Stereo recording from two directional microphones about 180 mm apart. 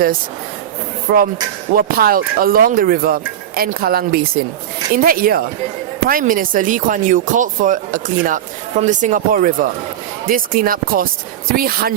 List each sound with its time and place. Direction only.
1.1 s speech: 55° right (ahead or behind)